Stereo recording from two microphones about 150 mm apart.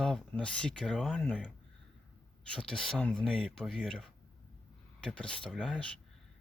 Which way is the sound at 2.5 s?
5° left (ahead or behind).